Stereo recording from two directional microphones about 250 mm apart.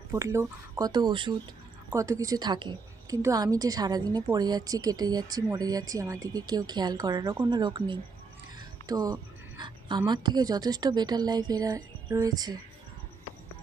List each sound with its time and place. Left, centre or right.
0.1 s a woman's voice: centre